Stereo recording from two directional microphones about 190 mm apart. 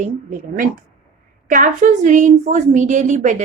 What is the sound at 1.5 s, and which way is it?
Speech, 40° right (ahead or behind).